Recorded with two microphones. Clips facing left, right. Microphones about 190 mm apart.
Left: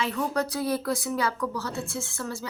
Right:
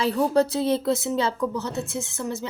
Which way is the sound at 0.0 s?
30° right (ahead or behind).